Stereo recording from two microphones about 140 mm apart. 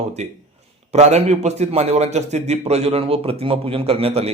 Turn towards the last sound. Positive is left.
turn(degrees=-45)  # may be behind; listen again after turning